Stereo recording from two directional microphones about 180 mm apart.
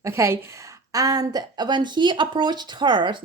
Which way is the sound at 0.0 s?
15° right (ahead or behind).